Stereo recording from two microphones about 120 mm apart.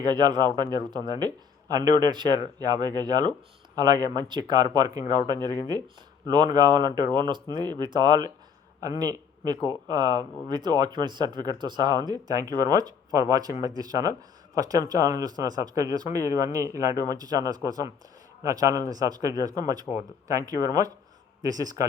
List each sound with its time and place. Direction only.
0.0 s speech: 35° right (ahead or behind)